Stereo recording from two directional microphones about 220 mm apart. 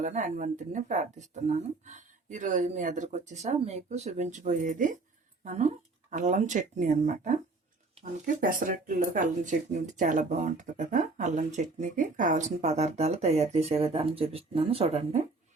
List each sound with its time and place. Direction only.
0.0 s speech: 35° right (ahead or behind)